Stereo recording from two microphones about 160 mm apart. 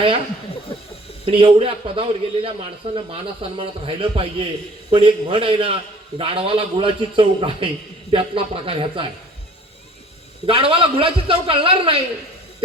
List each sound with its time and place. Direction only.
1.2 s a man's voice: 35° right (ahead or behind)
10.4 s a man's voice: 35° right (ahead or behind)